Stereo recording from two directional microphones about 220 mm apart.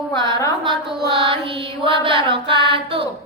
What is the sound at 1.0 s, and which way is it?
Mantra, 25° right (ahead or behind).